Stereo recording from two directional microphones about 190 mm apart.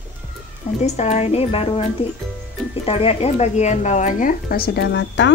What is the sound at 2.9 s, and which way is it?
Speech, 30° left (ahead or behind).